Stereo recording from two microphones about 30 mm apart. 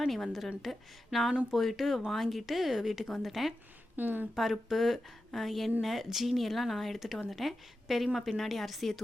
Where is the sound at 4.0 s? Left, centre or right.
Right.